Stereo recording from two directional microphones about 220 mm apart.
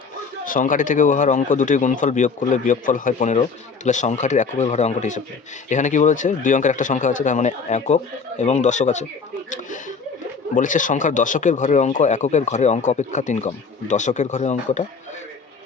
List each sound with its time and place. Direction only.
0.4 s speech: 35° left (ahead or behind)